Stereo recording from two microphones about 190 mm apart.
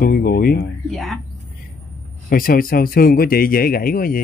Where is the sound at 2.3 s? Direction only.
50° left (ahead or behind).